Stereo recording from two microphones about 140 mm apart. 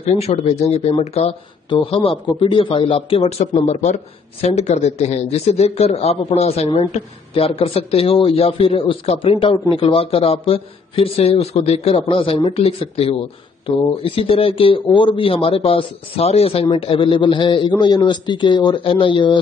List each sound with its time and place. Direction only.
0.0 s speech: 50° left (ahead or behind)
3.7 s speech: 60° left (ahead or behind); by 19.3 s 35° left (ahead or behind)